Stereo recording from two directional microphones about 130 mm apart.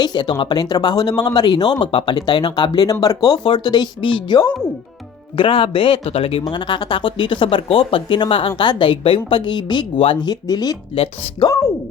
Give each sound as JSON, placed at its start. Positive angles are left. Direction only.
{"t": 0.0, "sound": "speech", "side_deg": 35}
{"t": 10.9, "sound": "speech", "side_deg": 50}